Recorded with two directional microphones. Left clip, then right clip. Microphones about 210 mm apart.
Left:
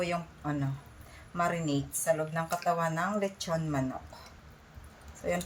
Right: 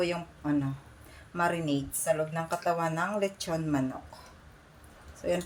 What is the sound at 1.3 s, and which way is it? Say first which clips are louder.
Speech: right 2 dB; 20° right (ahead or behind).